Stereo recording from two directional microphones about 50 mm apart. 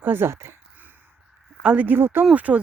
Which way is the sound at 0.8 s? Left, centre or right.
Right.